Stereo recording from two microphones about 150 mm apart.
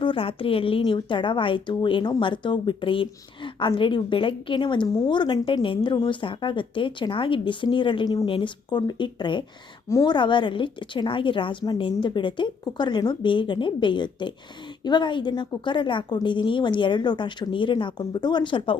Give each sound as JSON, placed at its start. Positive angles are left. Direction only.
{"t": 0.0, "sound": "a woman's voice", "side_deg": 35}